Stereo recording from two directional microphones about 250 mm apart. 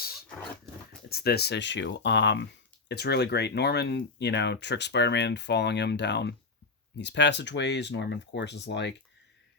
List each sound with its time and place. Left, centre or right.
0.3 s dog: centre
1.1 s speech: left